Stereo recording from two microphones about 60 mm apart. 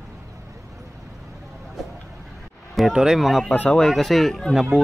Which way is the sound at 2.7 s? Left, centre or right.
Centre.